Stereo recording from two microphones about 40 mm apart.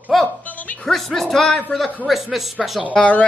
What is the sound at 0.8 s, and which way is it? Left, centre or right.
Speech, centre.